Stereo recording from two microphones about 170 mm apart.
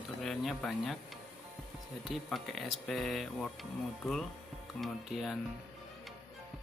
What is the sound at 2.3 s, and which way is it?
Speech, centre (ahead or behind).